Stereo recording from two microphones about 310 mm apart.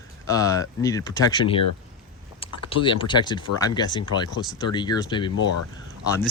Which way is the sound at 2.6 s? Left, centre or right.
Centre.